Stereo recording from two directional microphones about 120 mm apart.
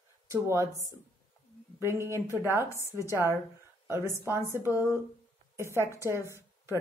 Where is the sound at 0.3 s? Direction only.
25° right (ahead or behind).